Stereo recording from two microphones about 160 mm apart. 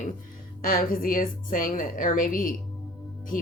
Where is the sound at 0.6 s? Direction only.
60° left (ahead or behind).